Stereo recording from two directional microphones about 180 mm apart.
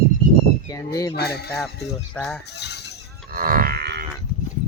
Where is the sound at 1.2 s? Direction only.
65° left (ahead or behind).